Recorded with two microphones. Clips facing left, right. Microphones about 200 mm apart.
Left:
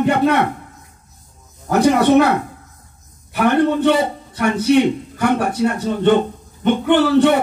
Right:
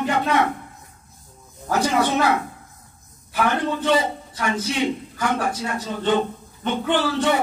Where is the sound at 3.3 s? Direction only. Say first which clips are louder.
Left 7 dB; 60° left (ahead or behind).